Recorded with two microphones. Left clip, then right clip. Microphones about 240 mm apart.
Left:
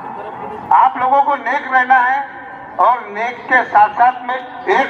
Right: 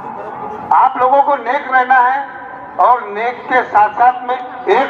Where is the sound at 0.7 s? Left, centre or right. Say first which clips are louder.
Right 1 dB; left.